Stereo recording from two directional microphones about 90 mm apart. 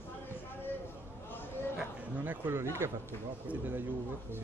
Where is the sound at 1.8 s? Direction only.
20° right (ahead or behind).